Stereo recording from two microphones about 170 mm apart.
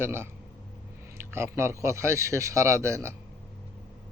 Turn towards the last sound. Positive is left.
turn(degrees=-15)  # may be behind; listen again after turning